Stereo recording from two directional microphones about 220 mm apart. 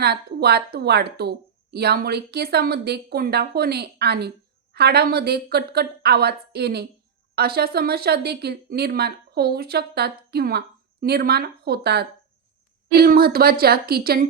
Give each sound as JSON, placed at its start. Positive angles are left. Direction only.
{"t": 0.0, "sound": "a woman's voice", "side_deg": -45}